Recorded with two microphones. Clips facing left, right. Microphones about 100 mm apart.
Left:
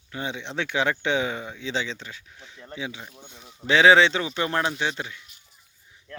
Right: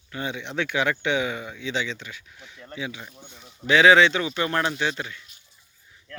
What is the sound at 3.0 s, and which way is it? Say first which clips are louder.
Speech: even; 10° left (ahead or behind).